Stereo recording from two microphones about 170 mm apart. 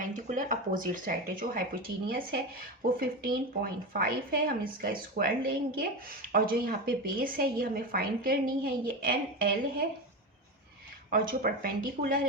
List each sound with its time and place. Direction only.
0.0 s a woman's voice: 50° right (ahead or behind)
11.1 s a woman's voice: 55° right (ahead or behind)